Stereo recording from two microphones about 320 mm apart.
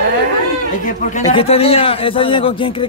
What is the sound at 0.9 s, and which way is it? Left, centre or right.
A man's voice, left.